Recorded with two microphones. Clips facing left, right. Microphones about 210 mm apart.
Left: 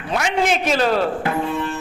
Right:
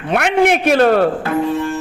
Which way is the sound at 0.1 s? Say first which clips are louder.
Right 6 dB; 60° right (ahead or behind).